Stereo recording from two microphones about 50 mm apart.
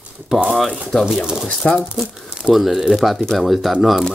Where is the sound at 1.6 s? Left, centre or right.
Left.